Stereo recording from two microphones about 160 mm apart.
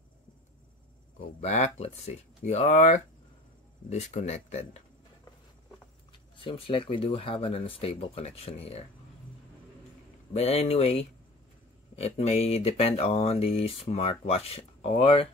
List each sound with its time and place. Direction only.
1.4 s speech: 45° left (ahead or behind)
6.4 s speech: 35° left (ahead or behind)
10.3 s speech: 40° left (ahead or behind)